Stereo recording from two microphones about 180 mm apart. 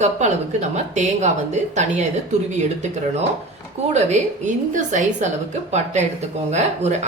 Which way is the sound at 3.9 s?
40° right (ahead or behind).